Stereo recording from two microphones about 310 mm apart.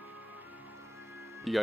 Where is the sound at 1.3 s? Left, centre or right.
Centre.